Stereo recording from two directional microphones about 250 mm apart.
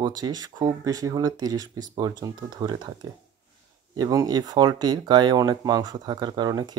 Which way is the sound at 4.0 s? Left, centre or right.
Centre.